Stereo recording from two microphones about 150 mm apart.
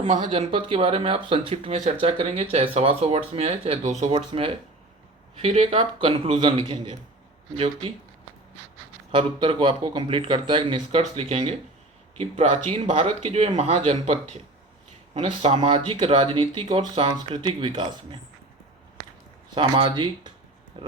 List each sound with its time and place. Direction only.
0.0 s speech: 30° right (ahead or behind)
9.1 s speech: 35° right (ahead or behind)
19.5 s speech: 35° right (ahead or behind)